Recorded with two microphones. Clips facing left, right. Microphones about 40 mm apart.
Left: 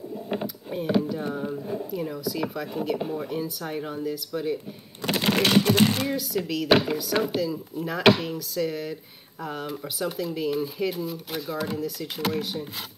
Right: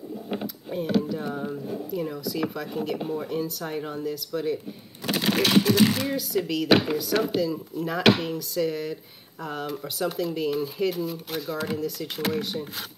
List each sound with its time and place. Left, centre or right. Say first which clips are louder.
0.3 s speech: left 1 dB; centre
5.2 s speech: even; left
6.0 s speech: right 1 dB; centre